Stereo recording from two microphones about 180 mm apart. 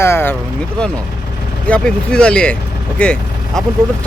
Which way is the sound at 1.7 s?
5° left (ahead or behind).